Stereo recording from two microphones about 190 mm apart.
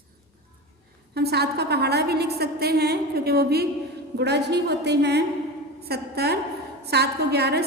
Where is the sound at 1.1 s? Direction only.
60° right (ahead or behind).